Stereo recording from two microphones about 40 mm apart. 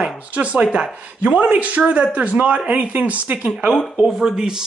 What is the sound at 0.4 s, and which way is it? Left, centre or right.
Speech, right.